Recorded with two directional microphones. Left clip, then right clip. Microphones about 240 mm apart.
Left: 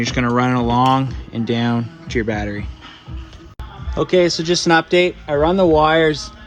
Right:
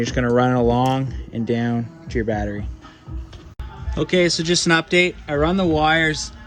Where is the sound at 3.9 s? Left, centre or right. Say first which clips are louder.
Left 3 dB; centre.